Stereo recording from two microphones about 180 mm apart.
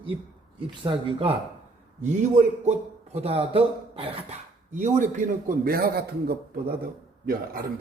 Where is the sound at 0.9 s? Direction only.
30° right (ahead or behind).